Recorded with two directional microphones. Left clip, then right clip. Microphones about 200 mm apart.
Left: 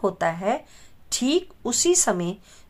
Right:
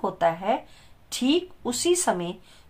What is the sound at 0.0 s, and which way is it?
Speech, 45° left (ahead or behind).